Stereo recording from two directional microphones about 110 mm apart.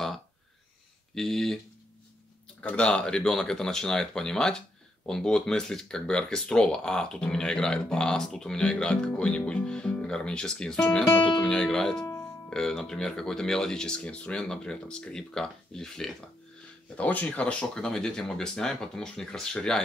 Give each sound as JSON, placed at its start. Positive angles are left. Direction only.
{"t": 1.1, "sound": "speech", "side_deg": 5}
{"t": 2.6, "sound": "speech", "side_deg": 10}
{"t": 12.0, "sound": "music", "side_deg": 30}
{"t": 12.4, "sound": "speech", "side_deg": 5}